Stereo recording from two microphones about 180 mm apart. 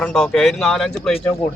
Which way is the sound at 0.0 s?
5° left (ahead or behind).